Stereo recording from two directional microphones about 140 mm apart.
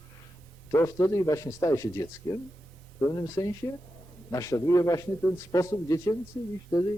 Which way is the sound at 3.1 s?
25° left (ahead or behind).